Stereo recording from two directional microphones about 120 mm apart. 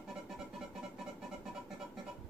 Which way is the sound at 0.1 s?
5° right (ahead or behind).